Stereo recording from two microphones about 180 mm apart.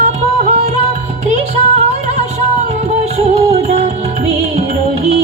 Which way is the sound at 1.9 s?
40° right (ahead or behind).